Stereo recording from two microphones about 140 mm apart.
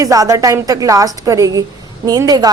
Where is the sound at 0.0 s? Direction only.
25° right (ahead or behind).